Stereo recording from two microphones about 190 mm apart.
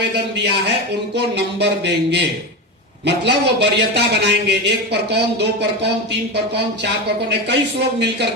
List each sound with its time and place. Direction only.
1.1 s speech: 65° right (ahead or behind)
3.2 s speech: 65° right (ahead or behind)
7.3 s speech: 65° right (ahead or behind)